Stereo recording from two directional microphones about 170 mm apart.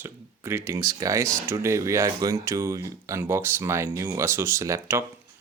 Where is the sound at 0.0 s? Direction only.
15° right (ahead or behind).